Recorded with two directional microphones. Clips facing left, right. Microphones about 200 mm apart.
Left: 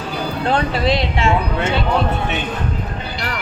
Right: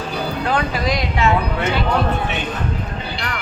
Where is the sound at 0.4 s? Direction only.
30° left (ahead or behind).